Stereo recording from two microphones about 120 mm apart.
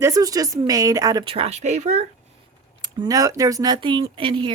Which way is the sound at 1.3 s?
50° right (ahead or behind).